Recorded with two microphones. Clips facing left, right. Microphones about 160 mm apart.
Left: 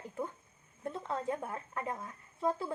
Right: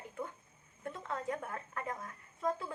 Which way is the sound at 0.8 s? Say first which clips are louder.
Left 3 dB; 30° left (ahead or behind).